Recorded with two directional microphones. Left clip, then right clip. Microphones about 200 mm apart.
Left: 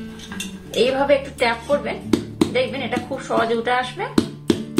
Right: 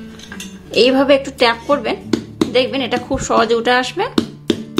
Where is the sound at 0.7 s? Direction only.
50° right (ahead or behind).